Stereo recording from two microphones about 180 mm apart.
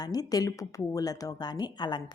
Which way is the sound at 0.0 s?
20° left (ahead or behind).